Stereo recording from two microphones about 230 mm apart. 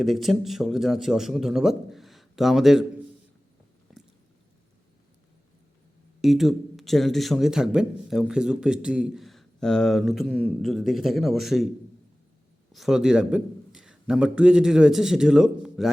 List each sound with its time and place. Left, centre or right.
0.0 s speech: centre
3.9 s biting: centre
6.2 s speech: centre
12.7 s a man's voice: centre